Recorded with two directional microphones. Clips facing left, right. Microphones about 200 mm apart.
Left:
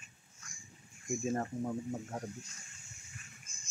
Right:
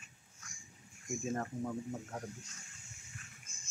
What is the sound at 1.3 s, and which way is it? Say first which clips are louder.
Speech: left 2 dB; 15° left (ahead or behind).